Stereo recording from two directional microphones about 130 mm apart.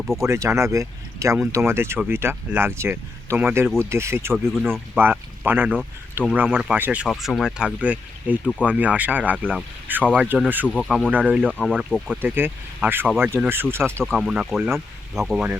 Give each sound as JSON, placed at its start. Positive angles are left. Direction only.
{"t": 0.3, "sound": "speech", "side_deg": -20}
{"t": 4.4, "sound": "speech", "side_deg": 5}
{"t": 4.9, "sound": "speech", "side_deg": -15}
{"t": 7.1, "sound": "speech", "side_deg": 0}
{"t": 10.8, "sound": "speech", "side_deg": 5}
{"t": 11.1, "sound": "speech", "side_deg": -15}
{"t": 11.6, "sound": "speech", "side_deg": 0}
{"t": 12.2, "sound": "speech", "side_deg": -15}
{"t": 14.2, "sound": "speech", "side_deg": -5}